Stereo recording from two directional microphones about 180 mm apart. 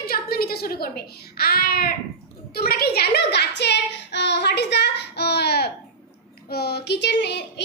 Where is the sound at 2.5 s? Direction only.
60° left (ahead or behind).